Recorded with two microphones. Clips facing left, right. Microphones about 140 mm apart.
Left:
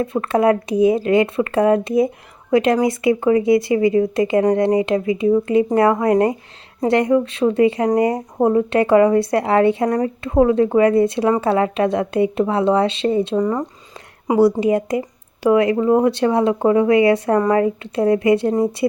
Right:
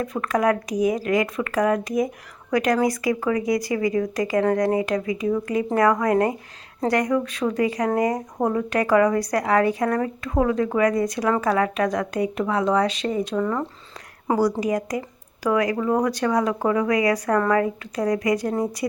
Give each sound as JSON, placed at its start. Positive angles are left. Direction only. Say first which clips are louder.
{"t": 0.0, "sound": "speech", "louder": "left 5 dB", "side_deg": 30}
{"t": 13.4, "sound": "speech", "louder": "left 4 dB", "side_deg": 15}
{"t": 14.6, "sound": "speech", "louder": "left 6 dB", "side_deg": 25}